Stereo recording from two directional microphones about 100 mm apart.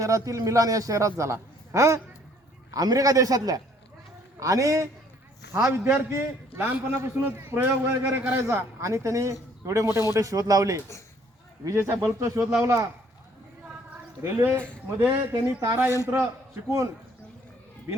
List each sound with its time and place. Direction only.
0.0 s a man's voice: 30° right (ahead or behind)
14.2 s a man's voice: 20° right (ahead or behind)